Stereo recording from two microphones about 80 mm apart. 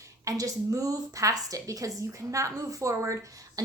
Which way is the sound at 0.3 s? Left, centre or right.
Right.